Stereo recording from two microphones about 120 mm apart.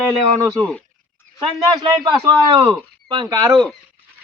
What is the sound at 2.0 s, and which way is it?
A man's voice, 40° right (ahead or behind).